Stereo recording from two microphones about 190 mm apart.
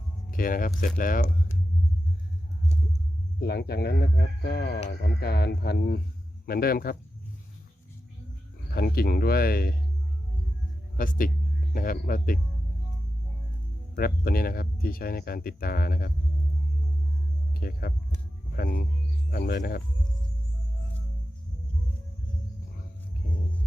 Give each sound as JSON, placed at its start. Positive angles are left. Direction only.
{"t": 0.3, "sound": "speech", "side_deg": 45}
{"t": 3.4, "sound": "speech", "side_deg": 55}
{"t": 8.7, "sound": "speech", "side_deg": 50}
{"t": 10.9, "sound": "speech", "side_deg": 45}
{"t": 13.9, "sound": "speech", "side_deg": 50}
{"t": 17.5, "sound": "speech", "side_deg": 55}